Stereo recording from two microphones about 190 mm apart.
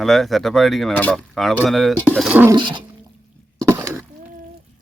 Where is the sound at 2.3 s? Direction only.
10° right (ahead or behind).